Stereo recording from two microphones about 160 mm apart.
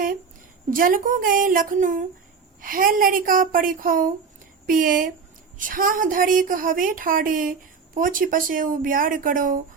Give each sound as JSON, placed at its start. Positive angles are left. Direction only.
{"t": 0.7, "sound": "a woman's voice", "side_deg": -60}